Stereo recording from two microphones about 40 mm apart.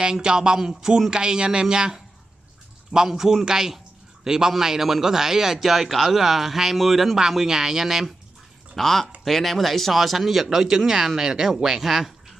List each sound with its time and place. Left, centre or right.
0.0 s a man's voice: centre
8.7 s a man's voice: centre